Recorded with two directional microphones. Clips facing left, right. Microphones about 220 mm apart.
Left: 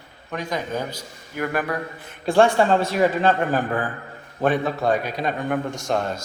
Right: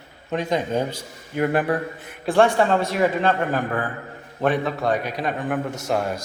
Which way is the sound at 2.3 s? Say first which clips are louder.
Left 1 dB; centre (ahead or behind).